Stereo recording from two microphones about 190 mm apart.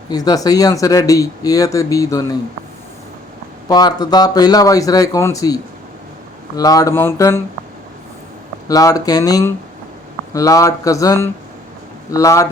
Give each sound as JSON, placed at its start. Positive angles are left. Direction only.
{"t": 0.1, "sound": "speech", "side_deg": 20}
{"t": 3.7, "sound": "speech", "side_deg": 20}
{"t": 6.6, "sound": "speech", "side_deg": 20}
{"t": 8.6, "sound": "speech", "side_deg": 20}